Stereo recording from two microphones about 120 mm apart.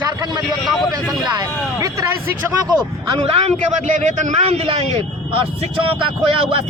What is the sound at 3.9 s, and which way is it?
Speech, 90° right.